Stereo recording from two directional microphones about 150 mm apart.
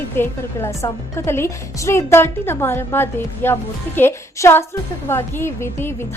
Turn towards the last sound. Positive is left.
turn(degrees=15)  # may be behind; listen again after turning